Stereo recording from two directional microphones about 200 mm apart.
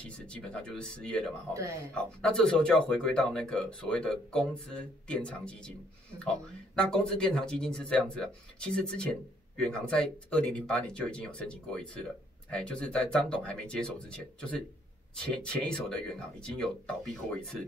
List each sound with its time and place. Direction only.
0.3 s speech: 5° left (ahead or behind)
1.5 s speech: 15° right (ahead or behind)
2.0 s speech: 5° left (ahead or behind)